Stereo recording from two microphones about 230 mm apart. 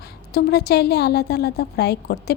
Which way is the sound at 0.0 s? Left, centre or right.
Left.